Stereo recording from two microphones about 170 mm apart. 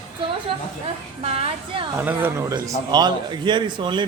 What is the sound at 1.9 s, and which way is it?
A man's voice, 10° right (ahead or behind).